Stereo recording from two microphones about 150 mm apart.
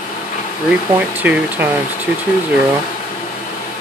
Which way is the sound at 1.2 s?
10° right (ahead or behind).